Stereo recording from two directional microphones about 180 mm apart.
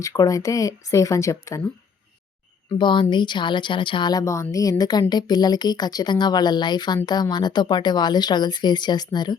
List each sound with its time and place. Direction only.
0.0 s speech: 20° left (ahead or behind)
2.6 s speech: 25° left (ahead or behind)